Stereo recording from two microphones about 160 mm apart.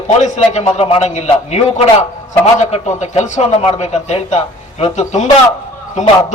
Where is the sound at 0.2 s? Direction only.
45° left (ahead or behind).